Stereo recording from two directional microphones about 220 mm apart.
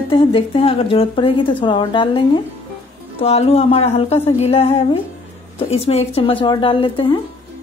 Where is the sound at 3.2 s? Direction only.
25° left (ahead or behind).